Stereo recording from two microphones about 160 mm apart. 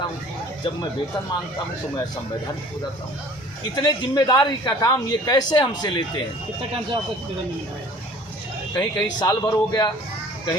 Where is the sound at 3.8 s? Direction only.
25° left (ahead or behind).